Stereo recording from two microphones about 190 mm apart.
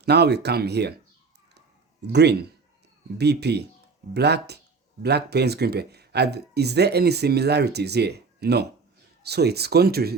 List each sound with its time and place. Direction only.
0.0 s speech: 60° right (ahead or behind)
1.5 s a sound: 60° right (ahead or behind)
3.2 s speech: 60° right (ahead or behind)